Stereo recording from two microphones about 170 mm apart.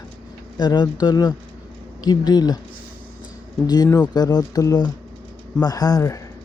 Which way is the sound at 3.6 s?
20° left (ahead or behind).